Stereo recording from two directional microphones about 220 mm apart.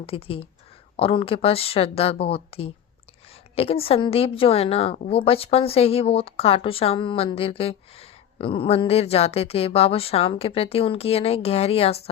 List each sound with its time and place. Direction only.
0.0 s a woman's voice: 25° left (ahead or behind)